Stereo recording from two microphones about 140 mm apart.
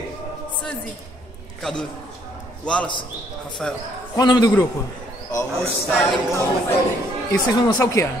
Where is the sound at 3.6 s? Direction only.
5° left (ahead or behind).